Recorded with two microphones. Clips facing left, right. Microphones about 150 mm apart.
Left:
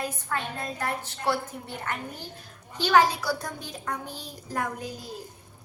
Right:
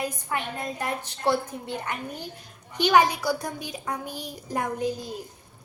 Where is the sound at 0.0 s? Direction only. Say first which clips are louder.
Right 2 dB; 15° right (ahead or behind).